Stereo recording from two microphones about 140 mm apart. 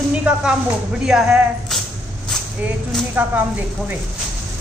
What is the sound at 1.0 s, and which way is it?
Speech, 5° right (ahead or behind).